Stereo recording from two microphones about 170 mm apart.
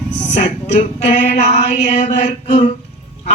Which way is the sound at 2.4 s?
30° left (ahead or behind).